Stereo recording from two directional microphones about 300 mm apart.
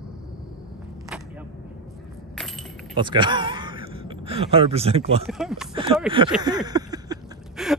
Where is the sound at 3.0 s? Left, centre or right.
Centre.